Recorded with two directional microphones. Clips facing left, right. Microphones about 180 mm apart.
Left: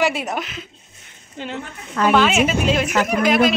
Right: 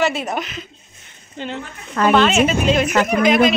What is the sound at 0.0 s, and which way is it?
A woman's voice, 10° left (ahead or behind).